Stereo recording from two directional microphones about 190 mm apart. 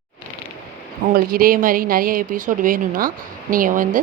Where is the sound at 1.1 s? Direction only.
50° right (ahead or behind).